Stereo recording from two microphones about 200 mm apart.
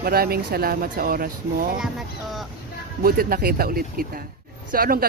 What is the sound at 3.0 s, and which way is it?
Speech, 45° right (ahead or behind).